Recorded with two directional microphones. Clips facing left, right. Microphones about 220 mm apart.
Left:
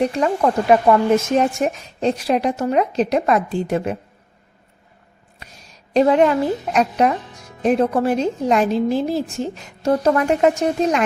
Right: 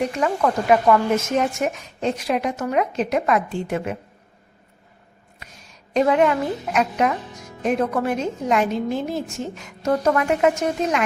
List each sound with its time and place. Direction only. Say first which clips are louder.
0.0 s a woman's voice: left 3 dB; 35° left (ahead or behind)
5.9 s a woman's voice: left 3 dB; 30° left (ahead or behind)